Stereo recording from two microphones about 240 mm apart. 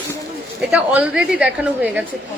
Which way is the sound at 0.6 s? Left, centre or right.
Centre.